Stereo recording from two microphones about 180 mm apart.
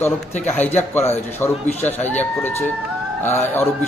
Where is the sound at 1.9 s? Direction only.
40° left (ahead or behind).